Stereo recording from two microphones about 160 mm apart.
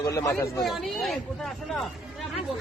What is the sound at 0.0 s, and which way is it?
Speech, 20° left (ahead or behind).